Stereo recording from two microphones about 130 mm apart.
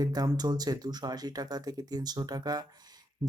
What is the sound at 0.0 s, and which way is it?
Speech, 30° right (ahead or behind).